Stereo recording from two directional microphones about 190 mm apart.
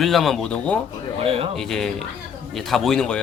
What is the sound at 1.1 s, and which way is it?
Speech, 30° right (ahead or behind).